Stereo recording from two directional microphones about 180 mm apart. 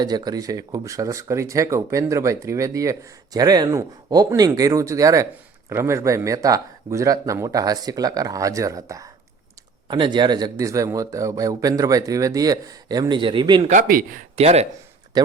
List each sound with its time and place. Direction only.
0.0 s speech: 20° right (ahead or behind)
13.7 s speech: 50° right (ahead or behind)
14.3 s speech: 35° right (ahead or behind)
15.1 s speech: 20° right (ahead or behind)